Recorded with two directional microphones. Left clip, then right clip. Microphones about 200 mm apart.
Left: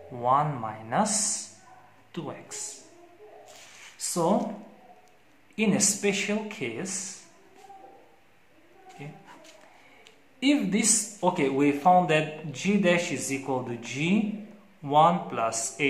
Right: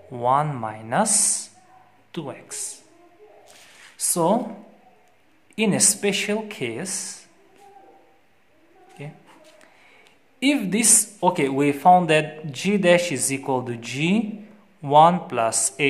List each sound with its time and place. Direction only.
0.1 s speech: 40° right (ahead or behind)
3.9 s speech: 50° right (ahead or behind)
5.6 s speech: 45° right (ahead or behind)
9.0 s speech: 50° right (ahead or behind)
10.4 s speech: 45° right (ahead or behind)